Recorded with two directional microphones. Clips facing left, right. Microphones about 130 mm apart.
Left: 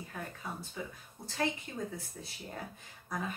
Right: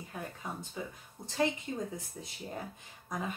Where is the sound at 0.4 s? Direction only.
15° right (ahead or behind).